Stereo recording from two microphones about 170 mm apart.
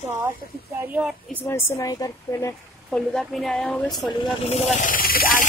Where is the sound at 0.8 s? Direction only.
5° right (ahead or behind).